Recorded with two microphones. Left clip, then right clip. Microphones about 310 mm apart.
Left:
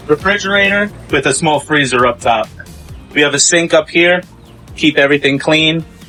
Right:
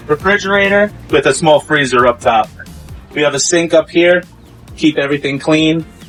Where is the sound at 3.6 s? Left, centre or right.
Left.